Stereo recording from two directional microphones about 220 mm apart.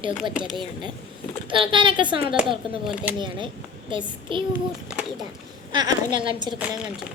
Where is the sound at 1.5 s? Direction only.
20° right (ahead or behind).